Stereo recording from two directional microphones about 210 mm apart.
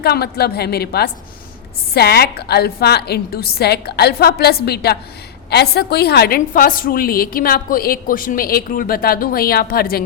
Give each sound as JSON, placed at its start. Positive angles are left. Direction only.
{"t": 0.0, "sound": "a woman's voice", "side_deg": 50}